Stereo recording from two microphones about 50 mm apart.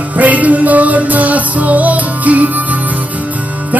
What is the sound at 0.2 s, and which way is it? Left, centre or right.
Music, right.